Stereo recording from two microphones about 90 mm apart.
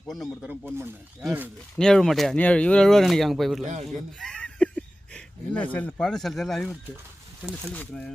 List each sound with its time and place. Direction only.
0.4 s speech: 25° right (ahead or behind)
1.7 s speech: 5° left (ahead or behind)
2.4 s speech: 15° left (ahead or behind)
7.7 s speech: 15° left (ahead or behind)